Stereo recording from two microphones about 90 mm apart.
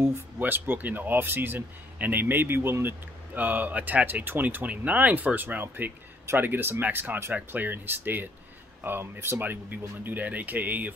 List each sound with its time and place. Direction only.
0.0 s speech: 25° right (ahead or behind)